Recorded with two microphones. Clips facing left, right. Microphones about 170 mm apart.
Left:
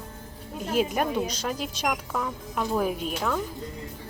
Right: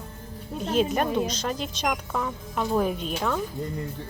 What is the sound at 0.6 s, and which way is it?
Speech, 10° left (ahead or behind).